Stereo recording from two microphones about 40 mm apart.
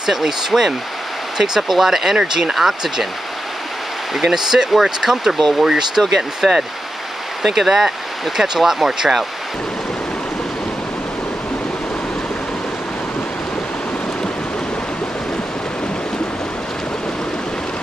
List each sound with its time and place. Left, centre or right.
0.0 s speech: centre
4.1 s speech: centre